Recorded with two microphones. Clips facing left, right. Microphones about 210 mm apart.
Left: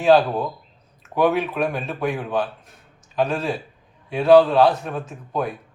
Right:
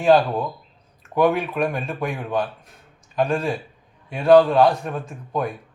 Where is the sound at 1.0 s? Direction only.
5° left (ahead or behind).